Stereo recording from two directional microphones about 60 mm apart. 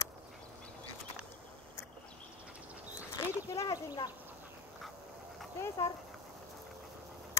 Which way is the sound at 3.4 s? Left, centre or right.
Left.